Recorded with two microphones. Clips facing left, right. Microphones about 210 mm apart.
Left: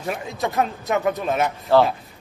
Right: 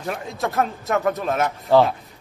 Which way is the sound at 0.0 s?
Centre (ahead or behind).